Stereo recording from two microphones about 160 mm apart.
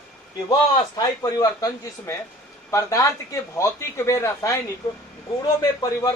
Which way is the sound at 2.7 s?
20° left (ahead or behind).